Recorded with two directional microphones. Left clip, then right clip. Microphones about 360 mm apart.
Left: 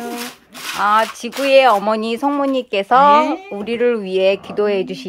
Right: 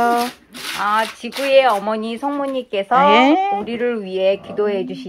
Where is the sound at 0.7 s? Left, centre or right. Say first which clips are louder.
Left 4 dB; left.